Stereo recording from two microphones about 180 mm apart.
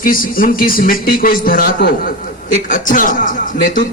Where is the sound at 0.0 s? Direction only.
50° left (ahead or behind).